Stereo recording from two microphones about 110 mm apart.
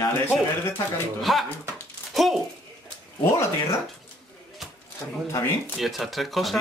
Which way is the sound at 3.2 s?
25° left (ahead or behind).